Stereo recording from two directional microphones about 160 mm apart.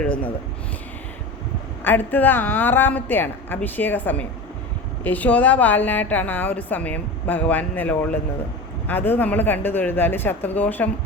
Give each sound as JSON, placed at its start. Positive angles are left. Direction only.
{"t": 0.0, "sound": "a woman's voice", "side_deg": 5}
{"t": 1.8, "sound": "a woman's voice", "side_deg": 10}